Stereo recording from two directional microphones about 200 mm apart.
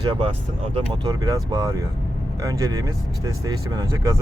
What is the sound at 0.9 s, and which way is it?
Speech, 20° right (ahead or behind).